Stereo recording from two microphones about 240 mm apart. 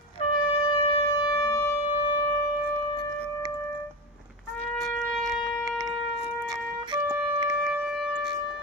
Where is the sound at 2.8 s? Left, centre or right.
Left.